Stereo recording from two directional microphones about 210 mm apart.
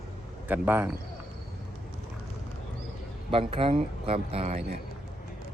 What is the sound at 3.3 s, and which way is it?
Speech, 25° right (ahead or behind).